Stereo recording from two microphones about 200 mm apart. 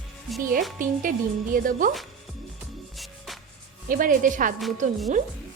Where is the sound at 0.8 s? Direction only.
40° right (ahead or behind).